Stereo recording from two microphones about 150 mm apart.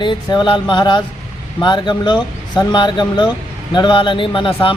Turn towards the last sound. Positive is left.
turn(degrees=35)  # may be behind; listen again after turning